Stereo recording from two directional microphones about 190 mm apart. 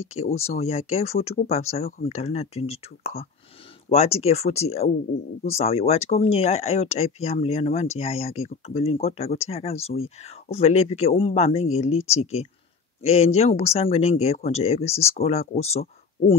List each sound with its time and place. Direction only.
0.0 s speech: 35° left (ahead or behind)